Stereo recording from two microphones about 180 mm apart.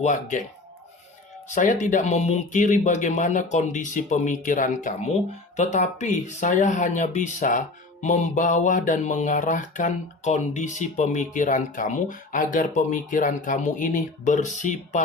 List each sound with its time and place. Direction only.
0.0 s mantra: 45° left (ahead or behind)
1.5 s mantra: 45° left (ahead or behind)